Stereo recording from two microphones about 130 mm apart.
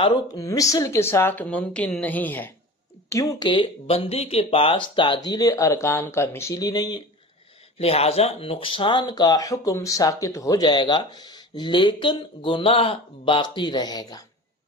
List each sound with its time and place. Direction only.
0.0 s a woman's voice: 30° left (ahead or behind); by 2.5 s 15° left (ahead or behind)
3.1 s speech: 25° left (ahead or behind)
7.8 s speech: 50° left (ahead or behind); by 14.2 s 30° left (ahead or behind)